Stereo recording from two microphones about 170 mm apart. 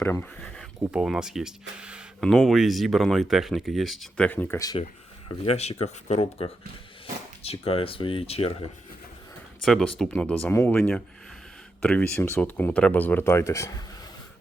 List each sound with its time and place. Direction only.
0.0 s speech: 10° left (ahead or behind)
0.8 s speech: 5° right (ahead or behind); by 4.6 s 10° left (ahead or behind)
5.5 s speech: 40° left (ahead or behind)
9.6 s speech: 5° left (ahead or behind); by 13.8 s 20° left (ahead or behind)